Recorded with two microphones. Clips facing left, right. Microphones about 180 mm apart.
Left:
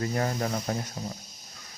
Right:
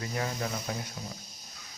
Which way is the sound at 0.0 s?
45° left (ahead or behind).